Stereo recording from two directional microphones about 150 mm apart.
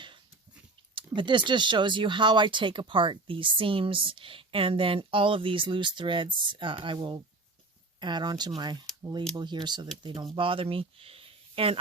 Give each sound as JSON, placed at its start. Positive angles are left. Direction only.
{"t": 0.9, "sound": "speech", "side_deg": -30}